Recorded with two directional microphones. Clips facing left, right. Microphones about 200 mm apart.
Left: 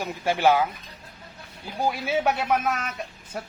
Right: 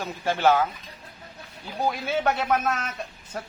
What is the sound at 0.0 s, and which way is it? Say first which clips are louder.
Speech: left 1 dB; 10° left (ahead or behind).